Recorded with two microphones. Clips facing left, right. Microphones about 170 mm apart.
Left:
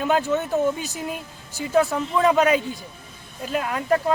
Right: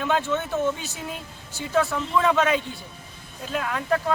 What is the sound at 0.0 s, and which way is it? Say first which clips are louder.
Speech: left 3 dB; 40° left (ahead or behind).